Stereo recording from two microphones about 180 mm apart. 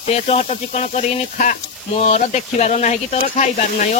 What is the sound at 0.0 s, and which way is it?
Speech, 35° left (ahead or behind).